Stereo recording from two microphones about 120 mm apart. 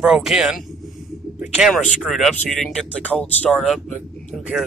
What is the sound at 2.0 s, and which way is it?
Speech, centre (ahead or behind).